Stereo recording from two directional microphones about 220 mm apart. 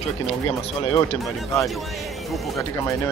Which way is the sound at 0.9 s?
15° left (ahead or behind).